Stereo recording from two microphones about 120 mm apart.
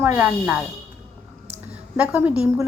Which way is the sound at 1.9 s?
10° right (ahead or behind).